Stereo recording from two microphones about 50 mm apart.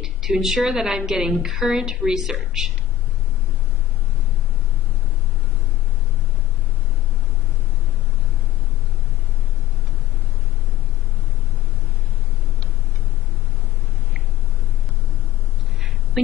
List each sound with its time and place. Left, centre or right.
0.0 s a woman's voice: centre